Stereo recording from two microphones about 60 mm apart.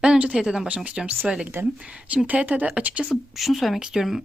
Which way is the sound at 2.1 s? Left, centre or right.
Right.